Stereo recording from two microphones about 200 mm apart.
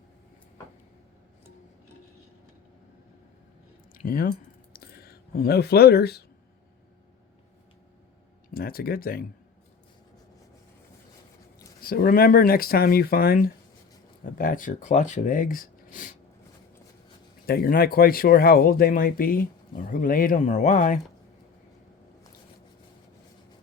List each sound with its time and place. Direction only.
3.9 s a sound: 45° left (ahead or behind)
8.5 s speech: 45° left (ahead or behind)
11.8 s speech: 50° left (ahead or behind)
17.4 s speech: 50° left (ahead or behind)